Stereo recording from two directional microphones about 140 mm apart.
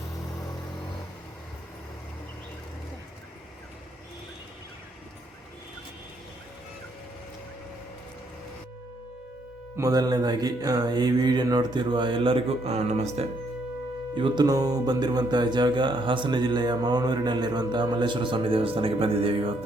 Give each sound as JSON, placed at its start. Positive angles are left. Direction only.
{"t": 9.7, "sound": "speech", "side_deg": -25}
{"t": 14.2, "sound": "speech", "side_deg": -35}